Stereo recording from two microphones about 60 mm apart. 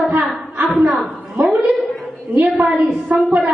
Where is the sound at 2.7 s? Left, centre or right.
Centre.